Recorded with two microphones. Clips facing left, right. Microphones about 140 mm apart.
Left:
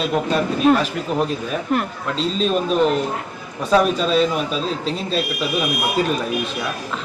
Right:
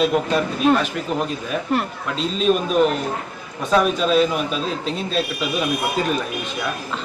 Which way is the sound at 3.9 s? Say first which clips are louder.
Even; centre (ahead or behind).